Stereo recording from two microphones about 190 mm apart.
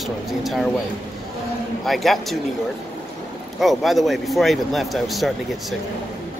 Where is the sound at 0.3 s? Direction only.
Centre (ahead or behind).